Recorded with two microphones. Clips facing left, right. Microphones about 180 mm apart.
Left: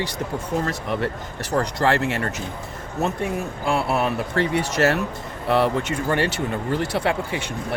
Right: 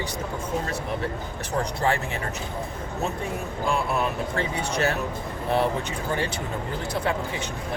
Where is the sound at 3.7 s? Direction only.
70° left (ahead or behind).